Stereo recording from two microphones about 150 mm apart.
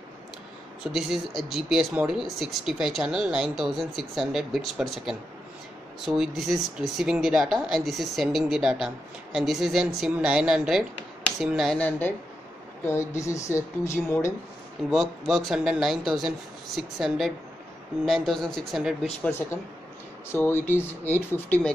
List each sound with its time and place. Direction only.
0.9 s speech: centre (ahead or behind)
12.8 s speech: 20° left (ahead or behind)
14.9 s speech: centre (ahead or behind)
19.2 s speech: 15° left (ahead or behind)